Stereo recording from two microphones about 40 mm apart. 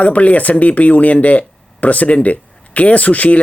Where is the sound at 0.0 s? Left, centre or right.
Left.